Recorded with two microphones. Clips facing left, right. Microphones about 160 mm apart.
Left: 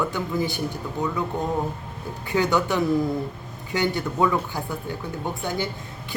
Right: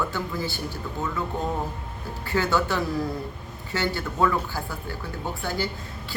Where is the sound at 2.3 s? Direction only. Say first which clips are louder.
Left 2 dB; 20° left (ahead or behind).